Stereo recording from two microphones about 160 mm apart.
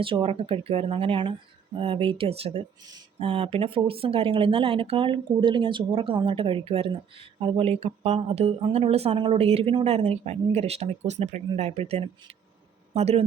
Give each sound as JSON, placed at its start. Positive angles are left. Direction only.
{"t": 0.0, "sound": "speech", "side_deg": -35}